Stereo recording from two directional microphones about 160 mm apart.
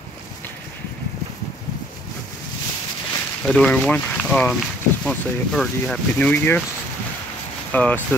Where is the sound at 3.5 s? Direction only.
5° left (ahead or behind).